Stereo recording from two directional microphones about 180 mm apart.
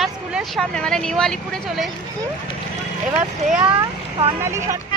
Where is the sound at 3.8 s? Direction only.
25° right (ahead or behind).